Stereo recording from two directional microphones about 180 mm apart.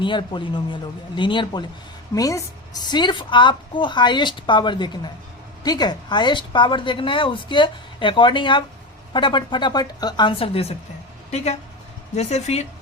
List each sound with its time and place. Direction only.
0.0 s a woman's voice: 25° left (ahead or behind)